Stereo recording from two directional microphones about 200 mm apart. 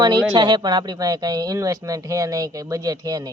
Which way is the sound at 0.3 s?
20° right (ahead or behind).